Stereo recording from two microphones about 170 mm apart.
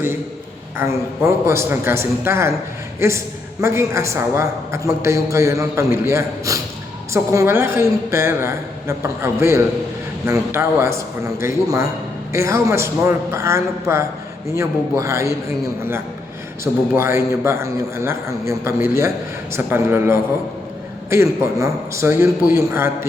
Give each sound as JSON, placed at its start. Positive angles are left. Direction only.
{"t": 0.8, "sound": "a woman's voice", "side_deg": -15}